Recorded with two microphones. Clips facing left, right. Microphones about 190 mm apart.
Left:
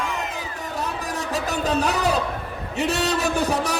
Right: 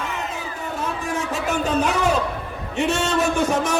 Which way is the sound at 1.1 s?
35° left (ahead or behind).